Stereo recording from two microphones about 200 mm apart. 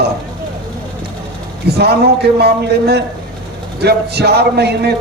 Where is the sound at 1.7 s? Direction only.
55° right (ahead or behind).